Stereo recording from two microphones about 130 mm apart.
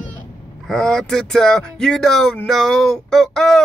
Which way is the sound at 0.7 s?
5° left (ahead or behind).